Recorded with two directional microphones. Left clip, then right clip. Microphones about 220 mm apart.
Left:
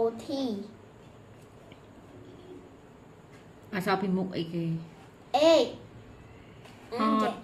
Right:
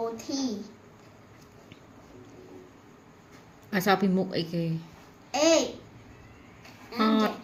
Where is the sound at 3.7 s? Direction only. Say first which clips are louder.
Right 4 dB; 30° right (ahead or behind).